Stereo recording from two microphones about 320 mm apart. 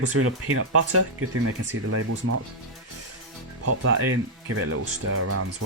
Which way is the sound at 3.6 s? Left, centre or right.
Right.